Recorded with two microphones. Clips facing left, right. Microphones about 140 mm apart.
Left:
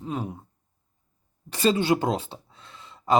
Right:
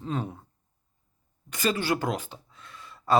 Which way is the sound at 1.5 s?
25° left (ahead or behind).